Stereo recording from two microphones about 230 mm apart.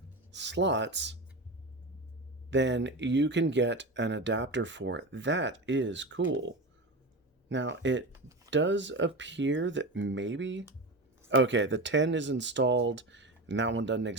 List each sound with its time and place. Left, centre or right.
0.3 s speech: right
2.5 s speech: right